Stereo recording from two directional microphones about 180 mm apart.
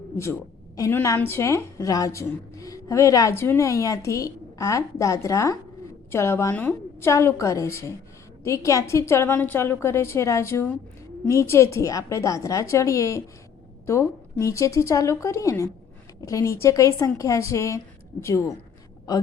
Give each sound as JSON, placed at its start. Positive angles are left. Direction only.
{"t": 0.8, "sound": "a woman's voice", "side_deg": 15}